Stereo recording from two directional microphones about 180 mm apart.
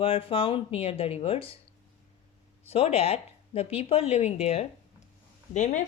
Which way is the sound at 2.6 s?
35° left (ahead or behind).